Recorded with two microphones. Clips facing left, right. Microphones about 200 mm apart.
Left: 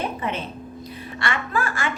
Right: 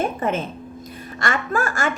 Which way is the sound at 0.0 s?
45° right (ahead or behind).